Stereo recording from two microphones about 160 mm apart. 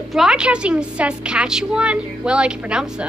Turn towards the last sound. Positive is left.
turn(degrees=-5)  # may be behind; listen again after turning